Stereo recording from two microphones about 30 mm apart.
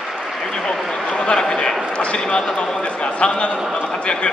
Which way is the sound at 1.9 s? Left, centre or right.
Left.